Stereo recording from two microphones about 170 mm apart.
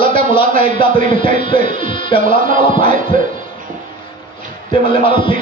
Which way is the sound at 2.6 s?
30° left (ahead or behind).